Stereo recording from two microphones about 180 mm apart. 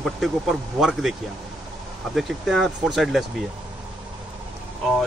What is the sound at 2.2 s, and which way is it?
Speech, centre (ahead or behind).